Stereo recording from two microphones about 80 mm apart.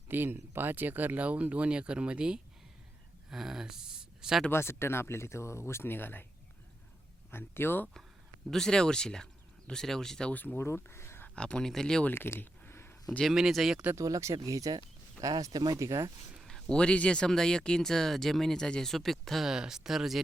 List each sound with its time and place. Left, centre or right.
0.1 s speech: right; by 4.4 s centre
4.5 s speech: left
7.3 s speech: left
8.4 s speech: centre
10.3 s speech: left
10.7 s speech: left
11.3 s speech: centre
12.0 s a sound: left
13.2 s speech: centre
13.9 s speech: right
16.4 s speech: centre